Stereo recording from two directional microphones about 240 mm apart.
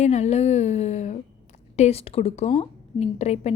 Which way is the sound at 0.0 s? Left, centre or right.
Left.